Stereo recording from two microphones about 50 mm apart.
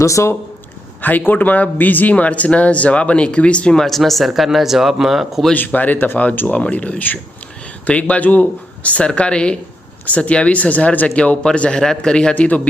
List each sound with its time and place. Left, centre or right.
0.0 s speech: left
1.3 s speech: left
3.7 s speech: centre
5.5 s a man's voice: left; by 12.3 s centre
12.3 s speech: left